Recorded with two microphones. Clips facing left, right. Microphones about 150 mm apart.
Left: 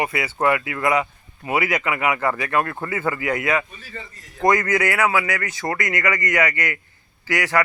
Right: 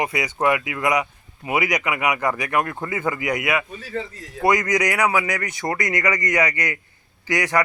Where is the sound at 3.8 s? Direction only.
80° right.